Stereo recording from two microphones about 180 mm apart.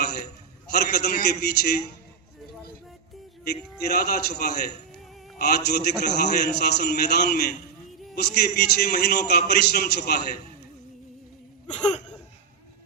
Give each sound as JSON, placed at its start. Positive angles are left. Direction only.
{"t": 0.7, "sound": "a man's voice", "side_deg": 60}
{"t": 3.4, "sound": "a man's voice", "side_deg": 60}
{"t": 11.7, "sound": "speech", "side_deg": 5}